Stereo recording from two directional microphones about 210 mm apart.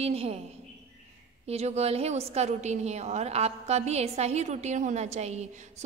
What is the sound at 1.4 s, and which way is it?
A woman's voice, 30° right (ahead or behind).